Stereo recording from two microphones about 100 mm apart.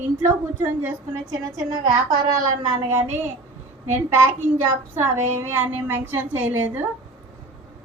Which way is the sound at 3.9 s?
25° right (ahead or behind).